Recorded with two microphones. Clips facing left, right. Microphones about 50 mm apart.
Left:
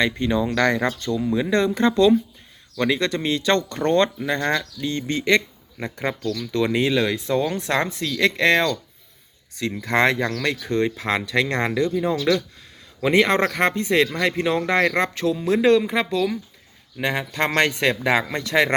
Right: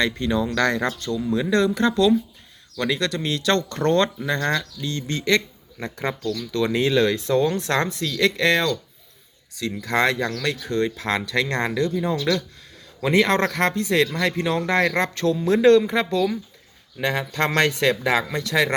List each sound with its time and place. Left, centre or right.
0.0 s speech: centre
6.7 s speech: centre
7.9 s speech: left
18.3 s speech: left